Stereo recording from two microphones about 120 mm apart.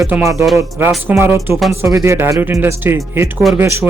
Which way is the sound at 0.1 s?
15° right (ahead or behind).